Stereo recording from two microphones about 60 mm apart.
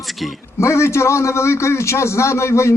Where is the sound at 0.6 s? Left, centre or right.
Left.